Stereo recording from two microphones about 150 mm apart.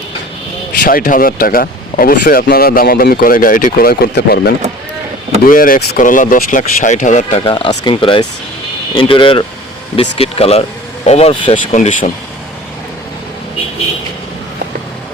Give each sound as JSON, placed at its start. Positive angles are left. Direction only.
{"t": 0.8, "sound": "speech", "side_deg": 75}
{"t": 5.5, "sound": "speech", "side_deg": 70}
{"t": 7.4, "sound": "speech", "side_deg": 30}
{"t": 11.5, "sound": "speech", "side_deg": 55}